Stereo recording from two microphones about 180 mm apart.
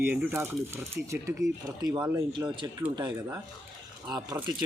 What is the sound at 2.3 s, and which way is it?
Speech, 25° right (ahead or behind).